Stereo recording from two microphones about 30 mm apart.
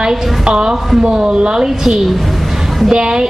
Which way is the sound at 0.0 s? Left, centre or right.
Centre.